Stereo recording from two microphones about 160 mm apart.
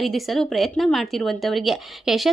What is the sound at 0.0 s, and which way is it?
A woman's voice, centre (ahead or behind).